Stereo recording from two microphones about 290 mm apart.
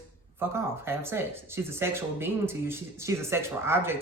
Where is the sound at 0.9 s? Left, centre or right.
Centre.